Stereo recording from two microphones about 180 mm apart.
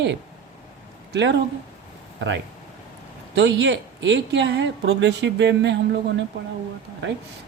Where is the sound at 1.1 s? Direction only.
75° right (ahead or behind).